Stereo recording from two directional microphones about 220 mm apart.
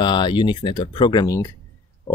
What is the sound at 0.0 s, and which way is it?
Speech, 20° left (ahead or behind).